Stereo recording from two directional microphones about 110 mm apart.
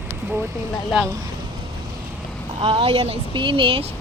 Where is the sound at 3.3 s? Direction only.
50° right (ahead or behind).